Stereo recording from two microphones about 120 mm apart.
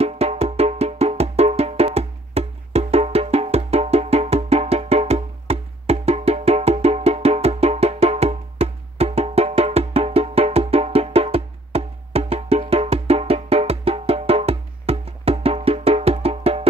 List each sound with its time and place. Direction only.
0.0 s music: 60° right (ahead or behind)